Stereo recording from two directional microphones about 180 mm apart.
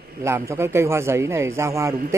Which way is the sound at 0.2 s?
15° right (ahead or behind).